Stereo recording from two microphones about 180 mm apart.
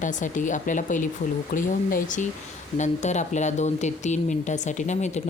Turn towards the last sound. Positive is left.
turn(degrees=40)  # may be behind; listen again after turning